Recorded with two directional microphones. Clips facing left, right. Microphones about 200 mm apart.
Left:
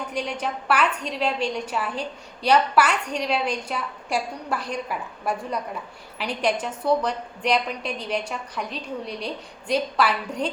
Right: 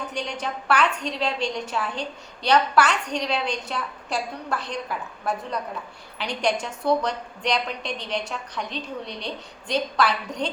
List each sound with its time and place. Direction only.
0.1 s a woman's voice: 5° left (ahead or behind)